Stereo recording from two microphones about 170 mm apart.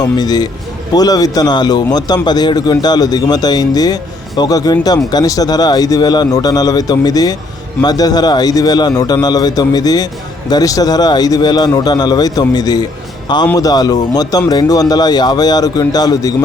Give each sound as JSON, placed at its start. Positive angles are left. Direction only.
{"t": 0.0, "sound": "a man's voice", "side_deg": 25}